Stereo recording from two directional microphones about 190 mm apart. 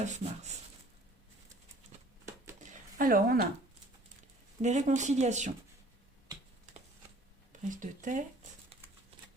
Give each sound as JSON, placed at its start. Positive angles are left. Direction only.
{"t": 0.0, "sound": "speech", "side_deg": -35}
{"t": 3.0, "sound": "speech", "side_deg": -50}
{"t": 4.6, "sound": "speech", "side_deg": -40}
{"t": 7.7, "sound": "speech", "side_deg": -40}